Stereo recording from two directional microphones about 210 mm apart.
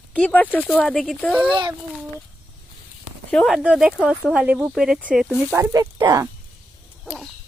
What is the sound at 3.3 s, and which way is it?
Speech, centre (ahead or behind).